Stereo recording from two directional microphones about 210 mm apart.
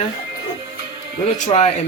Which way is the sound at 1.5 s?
30° left (ahead or behind).